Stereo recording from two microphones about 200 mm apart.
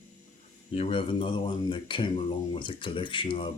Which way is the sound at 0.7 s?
30° left (ahead or behind).